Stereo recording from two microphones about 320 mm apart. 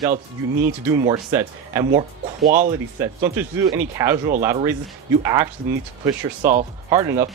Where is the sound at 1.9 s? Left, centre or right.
Right.